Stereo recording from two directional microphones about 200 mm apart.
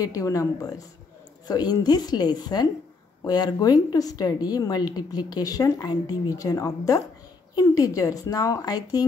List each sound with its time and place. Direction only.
0.0 s speech: 15° left (ahead or behind)